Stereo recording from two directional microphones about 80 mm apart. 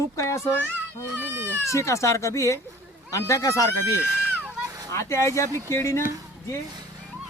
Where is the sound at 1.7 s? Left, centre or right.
Left.